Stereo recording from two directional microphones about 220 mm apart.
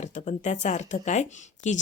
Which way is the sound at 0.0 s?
35° left (ahead or behind).